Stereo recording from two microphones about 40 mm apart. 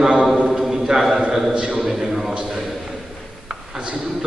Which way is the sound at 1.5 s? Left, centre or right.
Right.